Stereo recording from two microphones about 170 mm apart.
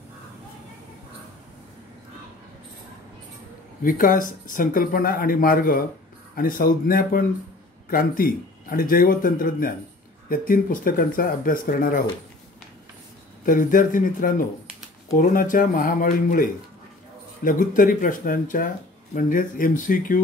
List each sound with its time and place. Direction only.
3.8 s speech: 55° left (ahead or behind)
13.5 s speech: 50° left (ahead or behind)